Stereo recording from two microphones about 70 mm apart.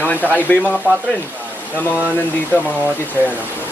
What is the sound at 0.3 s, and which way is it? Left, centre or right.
Speech, left.